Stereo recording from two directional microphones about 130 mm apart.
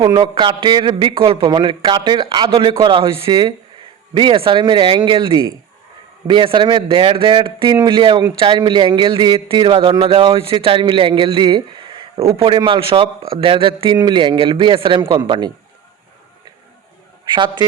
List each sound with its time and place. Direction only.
0.0 s a man's voice: 35° right (ahead or behind)
17.2 s a man's voice: 35° right (ahead or behind)